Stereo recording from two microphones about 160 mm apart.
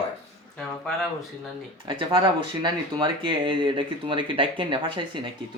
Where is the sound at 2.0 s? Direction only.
35° right (ahead or behind).